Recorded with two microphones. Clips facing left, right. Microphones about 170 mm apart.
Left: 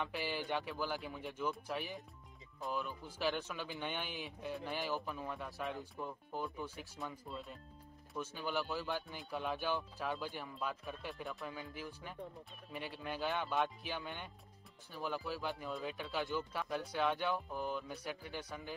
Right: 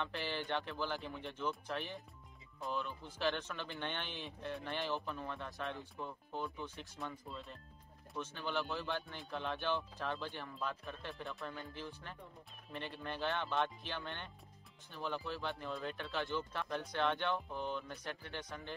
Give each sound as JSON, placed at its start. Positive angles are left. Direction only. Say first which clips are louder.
{"t": 0.0, "sound": "speech", "louder": "left 1 dB", "side_deg": 5}